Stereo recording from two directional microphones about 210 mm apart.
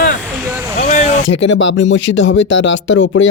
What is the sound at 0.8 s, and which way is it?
Vehicle, 35° left (ahead or behind).